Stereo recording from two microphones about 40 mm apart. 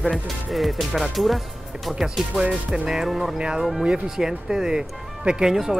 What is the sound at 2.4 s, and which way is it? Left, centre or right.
Speech, centre.